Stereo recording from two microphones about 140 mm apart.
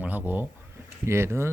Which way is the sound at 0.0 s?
10° right (ahead or behind).